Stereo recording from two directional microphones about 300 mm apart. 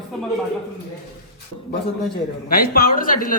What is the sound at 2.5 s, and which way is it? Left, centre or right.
Speech, left.